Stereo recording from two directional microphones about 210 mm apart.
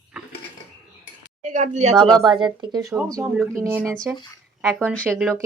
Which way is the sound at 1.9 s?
20° right (ahead or behind).